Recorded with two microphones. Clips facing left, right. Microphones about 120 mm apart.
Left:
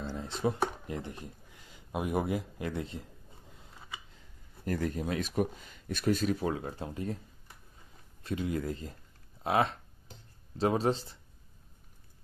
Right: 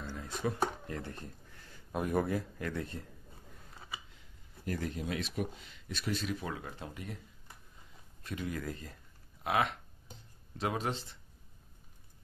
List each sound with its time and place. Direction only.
0.1 s speech: 25° left (ahead or behind)
4.6 s speech: 45° left (ahead or behind)
6.5 s speech: 30° left (ahead or behind)
8.2 s speech: 25° left (ahead or behind)